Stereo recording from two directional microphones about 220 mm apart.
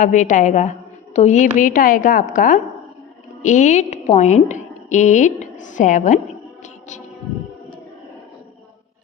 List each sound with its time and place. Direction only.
0.0 s a woman's voice: 35° left (ahead or behind)